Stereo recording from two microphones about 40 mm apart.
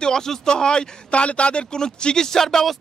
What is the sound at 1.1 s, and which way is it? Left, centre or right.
A man's voice, left.